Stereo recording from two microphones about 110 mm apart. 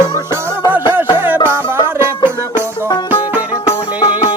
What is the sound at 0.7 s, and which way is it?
Music, 15° right (ahead or behind).